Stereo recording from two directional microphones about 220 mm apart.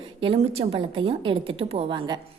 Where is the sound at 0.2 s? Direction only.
25° right (ahead or behind).